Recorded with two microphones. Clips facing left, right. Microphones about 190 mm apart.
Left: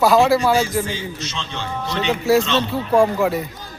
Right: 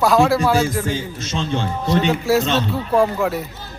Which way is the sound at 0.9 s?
45° right (ahead or behind).